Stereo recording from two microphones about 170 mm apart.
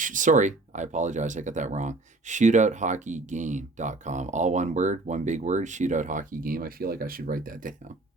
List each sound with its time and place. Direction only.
0.0 s speech: 50° right (ahead or behind)